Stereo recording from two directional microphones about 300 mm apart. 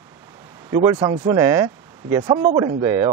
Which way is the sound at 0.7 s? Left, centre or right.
Centre.